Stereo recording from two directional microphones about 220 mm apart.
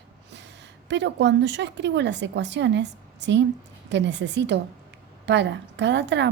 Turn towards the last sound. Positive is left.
turn(degrees=-50)  # may be behind; listen again after turning